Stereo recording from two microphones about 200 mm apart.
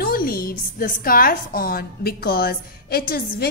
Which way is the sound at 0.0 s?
45° left (ahead or behind).